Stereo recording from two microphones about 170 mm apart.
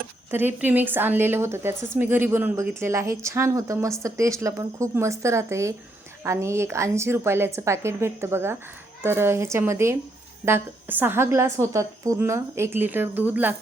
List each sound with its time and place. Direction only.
0.3 s a woman's voice: 10° right (ahead or behind)